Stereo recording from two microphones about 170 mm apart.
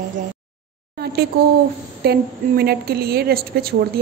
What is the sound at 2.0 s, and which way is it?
A woman's voice, 70° right (ahead or behind).